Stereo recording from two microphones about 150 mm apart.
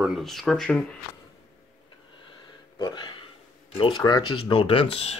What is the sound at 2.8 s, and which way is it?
Speech, 30° left (ahead or behind).